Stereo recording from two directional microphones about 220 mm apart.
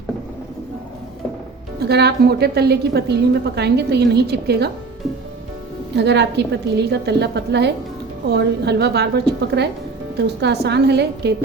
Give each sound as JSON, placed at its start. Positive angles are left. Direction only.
{"t": 1.8, "sound": "a woman's voice", "side_deg": -50}
{"t": 6.0, "sound": "a woman's voice", "side_deg": -50}